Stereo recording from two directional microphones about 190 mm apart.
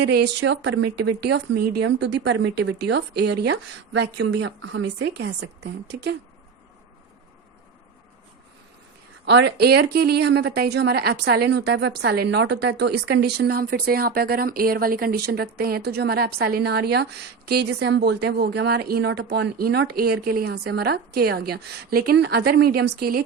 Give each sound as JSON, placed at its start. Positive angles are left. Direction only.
{"t": 0.0, "sound": "speech", "side_deg": -60}
{"t": 9.2, "sound": "speech", "side_deg": -65}